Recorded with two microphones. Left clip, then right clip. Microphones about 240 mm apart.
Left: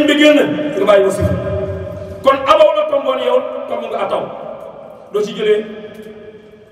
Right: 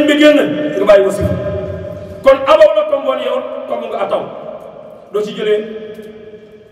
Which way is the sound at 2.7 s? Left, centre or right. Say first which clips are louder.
Right 1 dB; centre.